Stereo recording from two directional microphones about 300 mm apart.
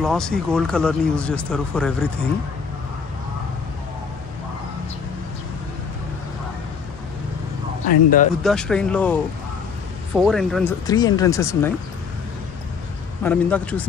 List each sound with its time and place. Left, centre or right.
0.0 s speech: centre
7.9 s speech: left
8.4 s speech: centre
10.9 s speech: centre
13.2 s speech: centre